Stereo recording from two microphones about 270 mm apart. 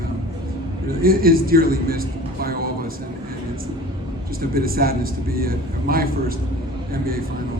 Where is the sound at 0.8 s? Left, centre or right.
Right.